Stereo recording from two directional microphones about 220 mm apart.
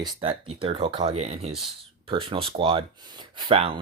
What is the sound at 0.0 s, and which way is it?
Speech, 25° right (ahead or behind).